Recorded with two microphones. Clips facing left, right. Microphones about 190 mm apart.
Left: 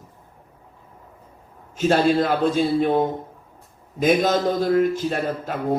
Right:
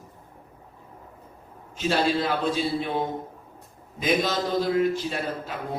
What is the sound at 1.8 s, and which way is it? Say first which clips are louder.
A man's voice: left 6 dB; 50° left (ahead or behind).